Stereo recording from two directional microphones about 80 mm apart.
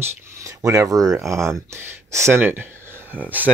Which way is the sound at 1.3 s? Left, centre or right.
Right.